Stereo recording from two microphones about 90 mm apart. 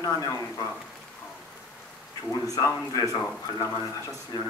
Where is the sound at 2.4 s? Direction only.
40° left (ahead or behind).